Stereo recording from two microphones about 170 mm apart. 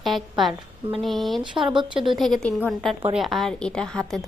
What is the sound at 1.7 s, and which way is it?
Speech, 30° right (ahead or behind).